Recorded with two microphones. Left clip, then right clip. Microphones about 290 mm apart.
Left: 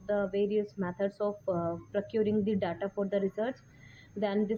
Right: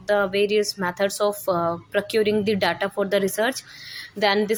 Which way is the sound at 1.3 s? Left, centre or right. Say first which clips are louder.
Right 10 dB; left.